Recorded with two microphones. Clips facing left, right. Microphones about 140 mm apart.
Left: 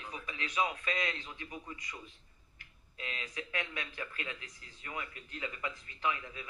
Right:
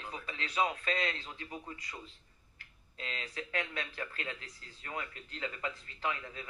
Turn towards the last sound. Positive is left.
turn(degrees=-35)  # may be behind; listen again after turning